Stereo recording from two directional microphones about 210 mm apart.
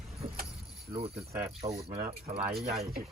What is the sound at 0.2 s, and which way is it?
Vehicle, 30° right (ahead or behind).